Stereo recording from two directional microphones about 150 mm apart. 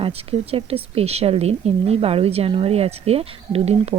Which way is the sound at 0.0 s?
40° right (ahead or behind).